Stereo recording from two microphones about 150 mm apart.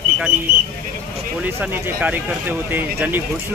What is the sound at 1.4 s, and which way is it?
Speech, 10° right (ahead or behind).